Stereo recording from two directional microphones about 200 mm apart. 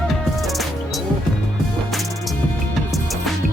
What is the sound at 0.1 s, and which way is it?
Music, centre (ahead or behind).